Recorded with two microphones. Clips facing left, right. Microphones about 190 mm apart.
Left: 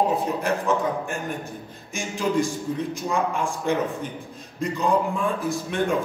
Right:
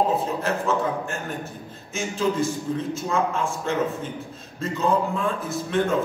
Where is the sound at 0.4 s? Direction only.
15° left (ahead or behind).